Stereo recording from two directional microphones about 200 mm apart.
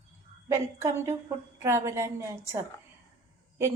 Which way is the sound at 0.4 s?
15° right (ahead or behind).